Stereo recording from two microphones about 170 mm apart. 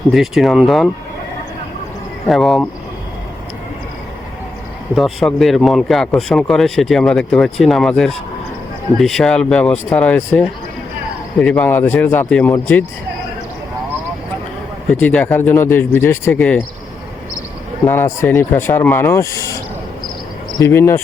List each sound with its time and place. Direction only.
0.1 s speech: centre (ahead or behind)
2.3 s speech: centre (ahead or behind)
4.9 s speech: centre (ahead or behind)
15.0 s speech: 10° left (ahead or behind)
17.8 s speech: 15° left (ahead or behind)
20.6 s speech: 15° left (ahead or behind)